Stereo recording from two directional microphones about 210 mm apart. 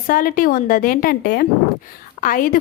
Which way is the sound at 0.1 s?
40° left (ahead or behind).